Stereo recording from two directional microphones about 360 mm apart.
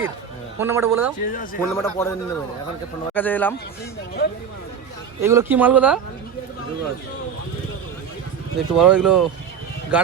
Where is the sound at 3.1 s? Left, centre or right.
Centre.